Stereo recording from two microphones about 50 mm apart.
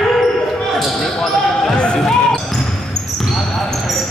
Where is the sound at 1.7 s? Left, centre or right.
Centre.